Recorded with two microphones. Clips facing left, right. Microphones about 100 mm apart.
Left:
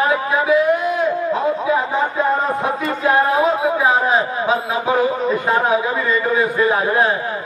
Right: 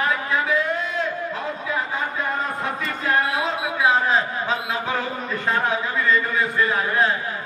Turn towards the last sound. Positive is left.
turn(degrees=20)  # may be behind; listen again after turning